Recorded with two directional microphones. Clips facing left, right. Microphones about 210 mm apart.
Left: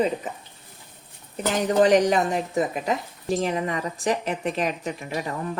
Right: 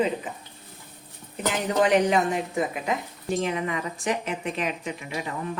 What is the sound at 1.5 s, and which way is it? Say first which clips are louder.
Speech: left 4 dB; 40° left (ahead or behind).